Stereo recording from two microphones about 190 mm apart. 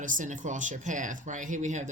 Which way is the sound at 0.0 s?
45° right (ahead or behind).